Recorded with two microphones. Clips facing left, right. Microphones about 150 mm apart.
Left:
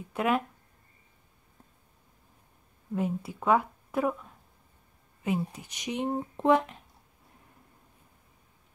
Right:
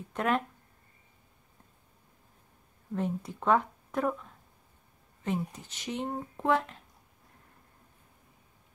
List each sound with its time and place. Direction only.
0.1 s speech: 5° left (ahead or behind)
2.9 s speech: 5° left (ahead or behind)